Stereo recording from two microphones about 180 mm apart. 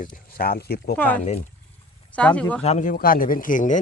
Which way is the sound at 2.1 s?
5° left (ahead or behind).